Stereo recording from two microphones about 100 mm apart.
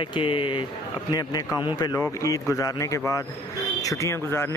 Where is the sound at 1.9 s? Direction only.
30° left (ahead or behind).